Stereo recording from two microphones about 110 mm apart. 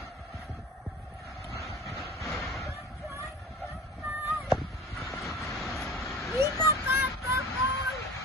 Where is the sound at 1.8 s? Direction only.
Centre (ahead or behind).